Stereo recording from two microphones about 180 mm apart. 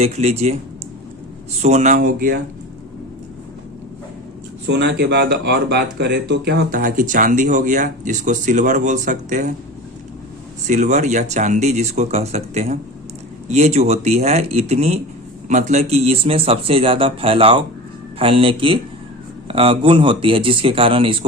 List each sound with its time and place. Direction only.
0.0 s speech: 35° right (ahead or behind)
1.6 s speech: 40° right (ahead or behind)
4.6 s speech: 75° right (ahead or behind); by 9.5 s 45° right (ahead or behind)
10.7 s speech: 40° right (ahead or behind)